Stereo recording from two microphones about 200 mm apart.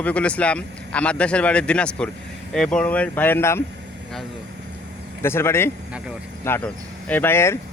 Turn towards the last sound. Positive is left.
turn(degrees=10)  # may be behind; listen again after turning